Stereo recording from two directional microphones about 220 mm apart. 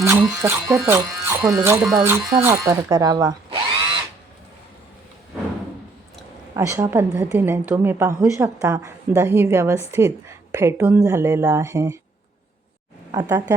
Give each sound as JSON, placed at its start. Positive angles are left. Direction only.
{"t": 0.0, "sound": "a woman's voice", "side_deg": -10}
{"t": 6.6, "sound": "a woman's voice", "side_deg": -15}
{"t": 13.1, "sound": "speech", "side_deg": -15}